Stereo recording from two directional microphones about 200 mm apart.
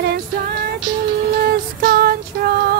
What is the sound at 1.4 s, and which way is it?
Music, 50° right (ahead or behind).